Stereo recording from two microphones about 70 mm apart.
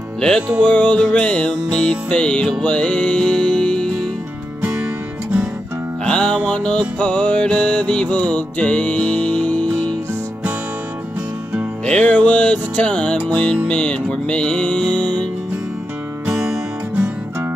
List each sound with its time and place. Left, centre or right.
0.7 s music: centre
6.0 s music: centre
11.8 s music: centre
16.3 s music: centre
16.9 s music: right